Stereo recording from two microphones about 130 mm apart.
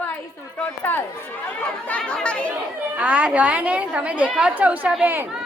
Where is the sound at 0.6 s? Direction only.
15° left (ahead or behind).